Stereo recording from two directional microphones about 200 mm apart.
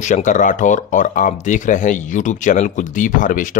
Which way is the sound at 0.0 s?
40° left (ahead or behind).